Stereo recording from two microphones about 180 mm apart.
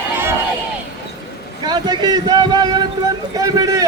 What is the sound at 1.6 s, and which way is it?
Speech, 25° right (ahead or behind).